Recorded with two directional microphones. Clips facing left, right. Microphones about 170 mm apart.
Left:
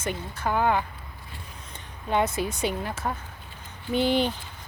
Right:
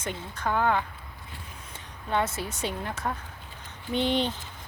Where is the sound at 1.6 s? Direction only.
5° right (ahead or behind).